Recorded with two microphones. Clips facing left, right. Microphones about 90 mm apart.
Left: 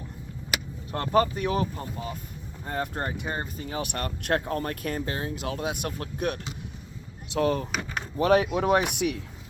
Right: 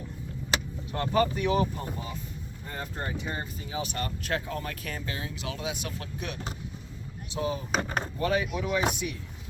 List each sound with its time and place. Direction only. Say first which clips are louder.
0.9 s speech: left 3 dB; 45° left (ahead or behind)
2.6 s speech: left 6 dB; 60° left (ahead or behind)
7.3 s speech: left 6 dB; 65° left (ahead or behind)
7.7 s speech: right 3 dB; 40° right (ahead or behind)
8.2 s speech: left 8 dB; 70° left (ahead or behind)